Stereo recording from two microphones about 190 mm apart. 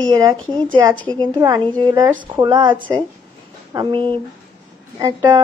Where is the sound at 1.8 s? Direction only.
20° right (ahead or behind).